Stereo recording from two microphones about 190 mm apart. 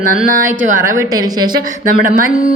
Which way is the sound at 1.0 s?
20° right (ahead or behind).